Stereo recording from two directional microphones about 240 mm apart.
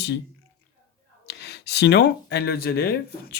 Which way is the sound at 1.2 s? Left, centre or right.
Left.